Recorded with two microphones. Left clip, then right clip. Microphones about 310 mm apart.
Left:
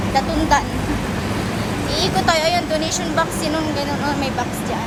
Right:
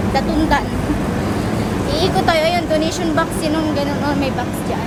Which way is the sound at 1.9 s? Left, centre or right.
Centre.